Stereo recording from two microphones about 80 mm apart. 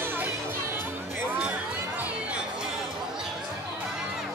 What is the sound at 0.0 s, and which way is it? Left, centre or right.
Music, right.